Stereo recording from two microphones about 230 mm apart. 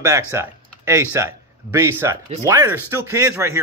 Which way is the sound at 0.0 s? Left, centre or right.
Centre.